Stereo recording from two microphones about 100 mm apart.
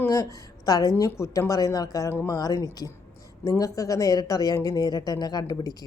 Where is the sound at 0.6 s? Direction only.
40° left (ahead or behind).